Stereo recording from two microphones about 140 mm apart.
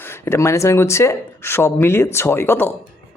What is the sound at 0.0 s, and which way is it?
Speech, 20° left (ahead or behind).